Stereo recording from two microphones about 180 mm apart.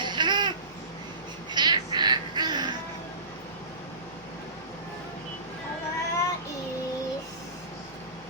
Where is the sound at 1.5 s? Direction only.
25° right (ahead or behind).